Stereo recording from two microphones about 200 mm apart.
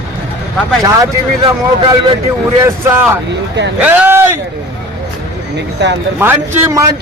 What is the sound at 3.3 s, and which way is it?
Speech, 60° right (ahead or behind).